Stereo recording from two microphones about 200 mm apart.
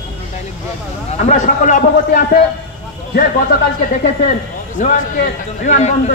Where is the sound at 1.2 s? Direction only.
40° left (ahead or behind).